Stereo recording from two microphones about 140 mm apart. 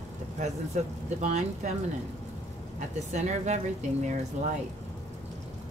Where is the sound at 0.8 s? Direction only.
60° right (ahead or behind).